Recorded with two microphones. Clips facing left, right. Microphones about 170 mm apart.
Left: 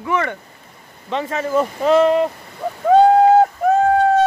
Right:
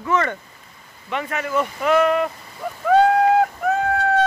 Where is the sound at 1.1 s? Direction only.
30° left (ahead or behind).